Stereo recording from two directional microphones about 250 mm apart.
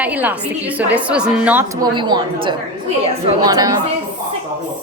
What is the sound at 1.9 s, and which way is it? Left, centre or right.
A woman's voice, centre.